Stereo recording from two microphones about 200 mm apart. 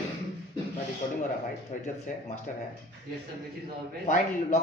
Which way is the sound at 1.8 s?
35° left (ahead or behind).